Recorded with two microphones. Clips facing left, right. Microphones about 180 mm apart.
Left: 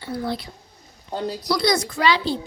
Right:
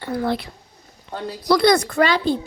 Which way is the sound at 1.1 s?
25° left (ahead or behind).